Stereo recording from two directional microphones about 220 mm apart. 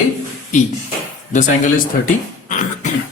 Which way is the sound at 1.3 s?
35° left (ahead or behind).